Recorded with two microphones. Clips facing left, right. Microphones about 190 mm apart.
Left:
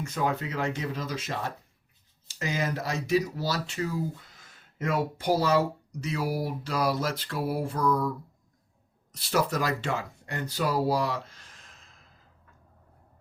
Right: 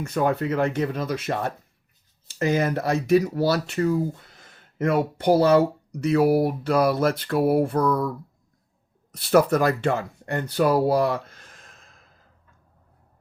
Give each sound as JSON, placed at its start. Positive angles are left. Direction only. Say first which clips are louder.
{"t": 0.0, "sound": "speech", "louder": "right 6 dB", "side_deg": -60}
{"t": 9.1, "sound": "speech", "louder": "right 9 dB", "side_deg": -55}